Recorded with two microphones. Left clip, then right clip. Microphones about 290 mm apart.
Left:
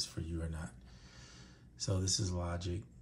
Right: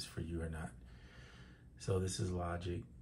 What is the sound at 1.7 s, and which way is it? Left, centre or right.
Speech, left.